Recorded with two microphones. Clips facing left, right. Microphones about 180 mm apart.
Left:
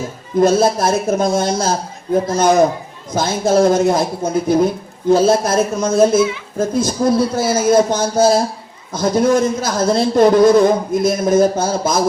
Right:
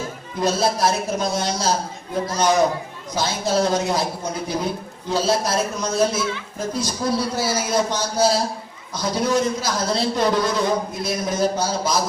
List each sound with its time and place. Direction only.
0.4 s a man's voice: 50° left (ahead or behind)